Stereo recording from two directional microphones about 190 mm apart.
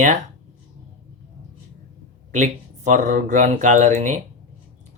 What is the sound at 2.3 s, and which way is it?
Speech, 40° right (ahead or behind).